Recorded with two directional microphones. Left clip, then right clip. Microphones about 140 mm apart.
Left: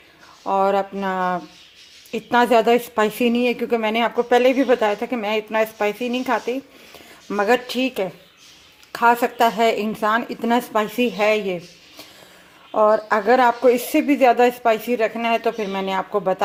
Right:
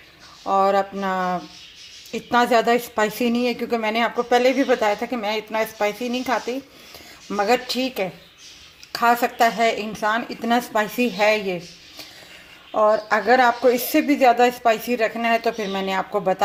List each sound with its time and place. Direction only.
0.4 s speech: 15° left (ahead or behind)
12.7 s speech: 20° left (ahead or behind)